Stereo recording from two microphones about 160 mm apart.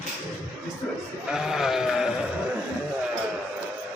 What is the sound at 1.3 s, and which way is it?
Sheep, 5° right (ahead or behind).